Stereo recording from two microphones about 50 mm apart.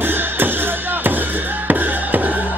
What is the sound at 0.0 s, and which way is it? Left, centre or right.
Music, right.